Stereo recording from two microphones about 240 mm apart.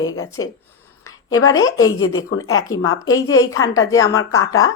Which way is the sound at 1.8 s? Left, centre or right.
Left.